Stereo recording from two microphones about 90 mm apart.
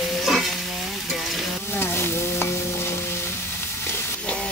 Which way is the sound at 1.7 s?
25° left (ahead or behind).